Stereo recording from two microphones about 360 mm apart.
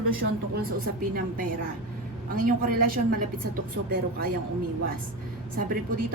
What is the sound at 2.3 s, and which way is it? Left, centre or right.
Speech, right.